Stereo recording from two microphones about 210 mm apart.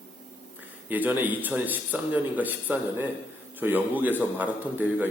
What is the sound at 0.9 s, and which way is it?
Speech, 10° right (ahead or behind).